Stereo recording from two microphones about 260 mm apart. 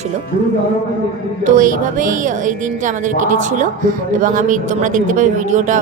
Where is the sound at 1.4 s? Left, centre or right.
Right.